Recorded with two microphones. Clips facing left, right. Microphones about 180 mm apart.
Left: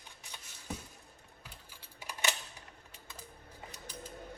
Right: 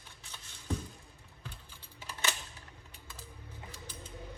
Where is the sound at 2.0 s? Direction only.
15° left (ahead or behind).